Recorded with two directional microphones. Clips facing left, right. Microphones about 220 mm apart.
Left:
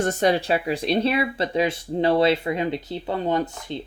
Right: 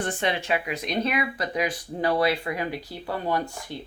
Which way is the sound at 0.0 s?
40° left (ahead or behind).